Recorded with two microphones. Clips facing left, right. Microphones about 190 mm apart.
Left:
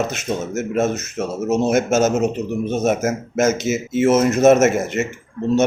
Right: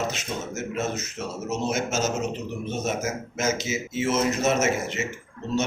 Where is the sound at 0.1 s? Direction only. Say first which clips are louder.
Left 8 dB; 50° left (ahead or behind).